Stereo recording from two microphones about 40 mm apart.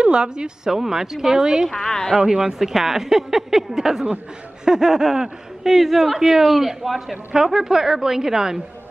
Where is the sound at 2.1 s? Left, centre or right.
Centre.